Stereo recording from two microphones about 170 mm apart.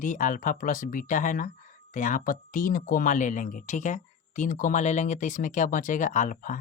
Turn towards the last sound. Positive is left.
turn(degrees=50)  # may be behind; listen again after turning